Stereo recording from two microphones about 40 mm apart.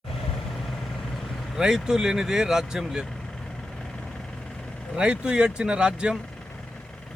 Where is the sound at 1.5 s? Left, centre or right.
Centre.